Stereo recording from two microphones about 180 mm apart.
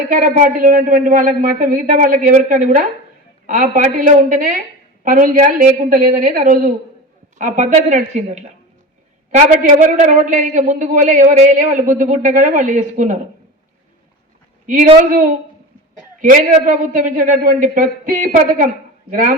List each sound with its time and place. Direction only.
0.1 s a man's voice: 50° right (ahead or behind)
15.1 s a man's voice: 50° right (ahead or behind)